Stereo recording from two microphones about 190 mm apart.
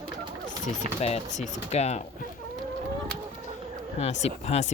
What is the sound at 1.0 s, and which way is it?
Speech, 35° left (ahead or behind).